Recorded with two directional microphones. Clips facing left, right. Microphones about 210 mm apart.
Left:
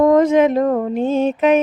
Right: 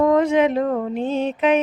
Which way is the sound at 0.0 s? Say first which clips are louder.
Left 4 dB; 45° left (ahead or behind).